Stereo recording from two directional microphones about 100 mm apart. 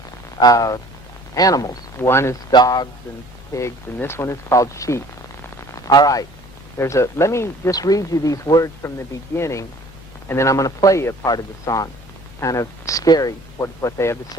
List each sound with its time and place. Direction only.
0.3 s speech: 40° left (ahead or behind)
2.0 s speech: 25° left (ahead or behind)
2.5 s speech: 45° left (ahead or behind)
3.5 s speech: 35° left (ahead or behind)
6.7 s speech: 30° left (ahead or behind)
7.7 s speech: 40° left (ahead or behind)
9.3 s speech: 30° left (ahead or behind)